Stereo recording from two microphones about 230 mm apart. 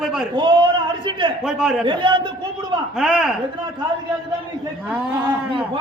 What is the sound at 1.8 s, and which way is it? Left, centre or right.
Speech, right.